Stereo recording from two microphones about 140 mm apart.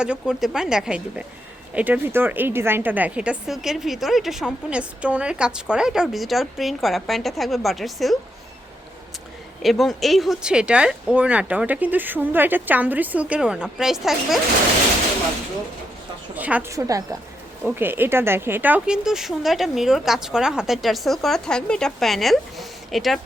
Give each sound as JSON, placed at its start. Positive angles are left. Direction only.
{"t": 0.0, "sound": "a woman's voice", "side_deg": -5}
{"t": 9.6, "sound": "speech", "side_deg": 0}
{"t": 16.3, "sound": "speech", "side_deg": -10}
{"t": 16.7, "sound": "a woman's voice", "side_deg": -25}